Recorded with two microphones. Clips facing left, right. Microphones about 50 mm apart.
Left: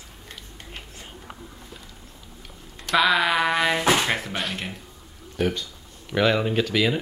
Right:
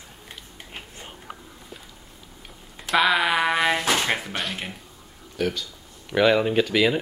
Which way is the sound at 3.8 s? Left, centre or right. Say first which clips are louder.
Left 3 dB; left.